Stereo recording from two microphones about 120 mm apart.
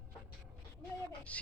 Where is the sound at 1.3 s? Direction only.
10° left (ahead or behind).